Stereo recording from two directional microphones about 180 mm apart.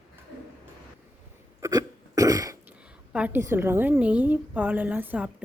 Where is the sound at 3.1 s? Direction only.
10° right (ahead or behind).